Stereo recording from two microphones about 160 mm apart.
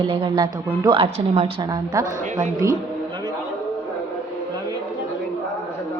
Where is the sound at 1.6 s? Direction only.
25° right (ahead or behind).